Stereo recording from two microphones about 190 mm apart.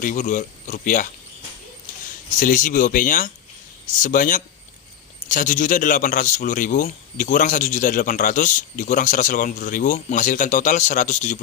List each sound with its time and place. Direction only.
0.0 s a man's voice: 45° left (ahead or behind)
2.3 s a man's voice: 45° left (ahead or behind)